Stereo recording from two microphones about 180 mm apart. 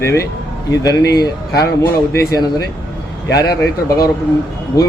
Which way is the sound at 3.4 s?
65° left (ahead or behind).